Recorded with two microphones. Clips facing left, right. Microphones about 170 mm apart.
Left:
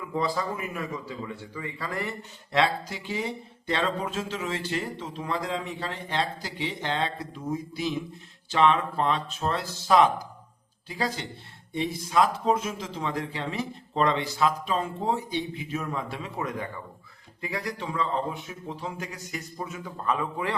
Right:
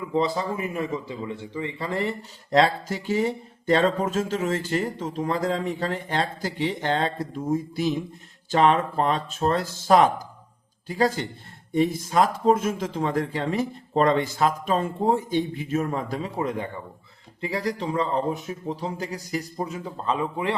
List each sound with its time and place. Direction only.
0.1 s speech: 25° right (ahead or behind)
2.5 s a man's voice: 40° right (ahead or behind); by 20.6 s 25° right (ahead or behind)